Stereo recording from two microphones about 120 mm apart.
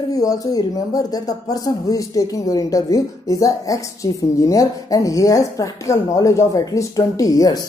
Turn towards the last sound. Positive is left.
turn(degrees=30)  # may be behind; listen again after turning